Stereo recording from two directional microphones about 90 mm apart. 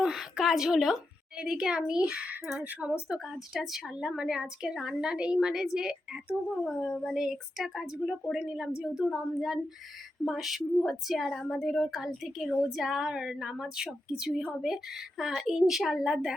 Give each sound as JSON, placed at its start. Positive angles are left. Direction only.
{"t": 0.0, "sound": "a woman's voice", "side_deg": -5}
{"t": 3.3, "sound": "a woman's voice", "side_deg": 0}